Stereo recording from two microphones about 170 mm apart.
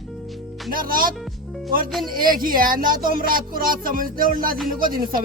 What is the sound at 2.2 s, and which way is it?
Music, 55° right (ahead or behind).